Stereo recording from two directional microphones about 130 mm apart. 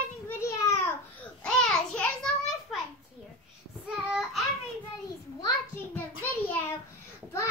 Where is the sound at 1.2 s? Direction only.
5° left (ahead or behind).